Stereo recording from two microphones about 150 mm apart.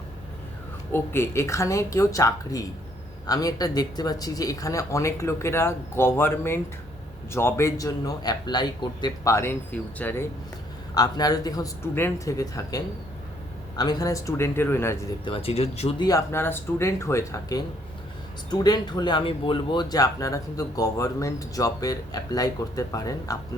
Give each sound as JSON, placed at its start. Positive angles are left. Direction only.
{"t": 0.9, "sound": "speech", "side_deg": 15}
{"t": 10.9, "sound": "speech", "side_deg": 25}
{"t": 15.2, "sound": "speech", "side_deg": 35}
{"t": 16.0, "sound": "speech", "side_deg": 25}
{"t": 18.6, "sound": "speech", "side_deg": 25}